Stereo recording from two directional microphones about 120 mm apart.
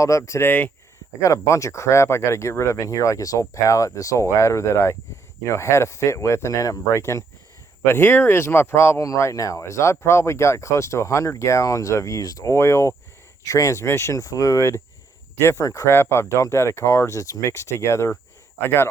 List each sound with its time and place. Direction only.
0.0 s speech: 25° left (ahead or behind)